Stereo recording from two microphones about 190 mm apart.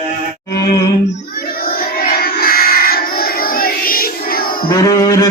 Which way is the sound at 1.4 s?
50° left (ahead or behind).